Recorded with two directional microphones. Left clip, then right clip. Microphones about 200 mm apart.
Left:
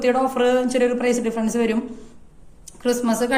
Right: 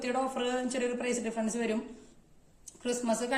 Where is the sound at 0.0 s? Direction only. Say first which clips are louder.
Left 13 dB; 50° right (ahead or behind).